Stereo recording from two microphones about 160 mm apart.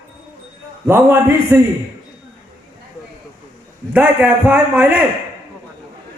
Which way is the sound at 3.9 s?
10° right (ahead or behind).